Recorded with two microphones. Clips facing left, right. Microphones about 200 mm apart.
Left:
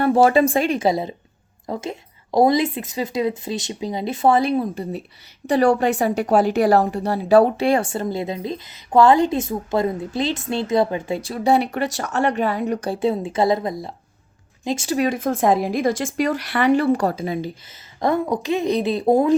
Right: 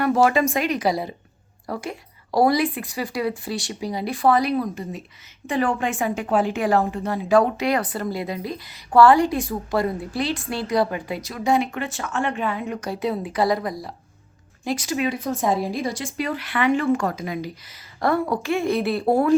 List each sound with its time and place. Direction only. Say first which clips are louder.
0.0 s a woman's voice: left 3 dB; 30° left (ahead or behind)
14.8 s speech: left 5 dB; 40° left (ahead or behind)
16.2 s a woman's voice: left 3 dB; 40° left (ahead or behind)
18.0 s a woman's voice: left 1 dB; 20° left (ahead or behind)